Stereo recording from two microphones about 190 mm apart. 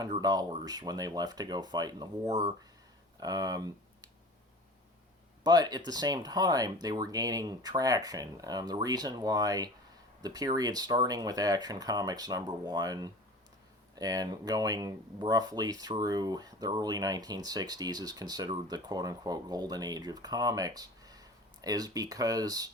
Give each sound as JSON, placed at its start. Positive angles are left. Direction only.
{"t": 0.0, "sound": "speech", "side_deg": -20}
{"t": 5.4, "sound": "speech", "side_deg": -20}